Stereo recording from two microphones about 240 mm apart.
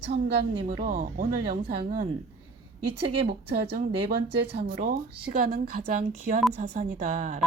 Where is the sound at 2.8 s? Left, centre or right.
Right.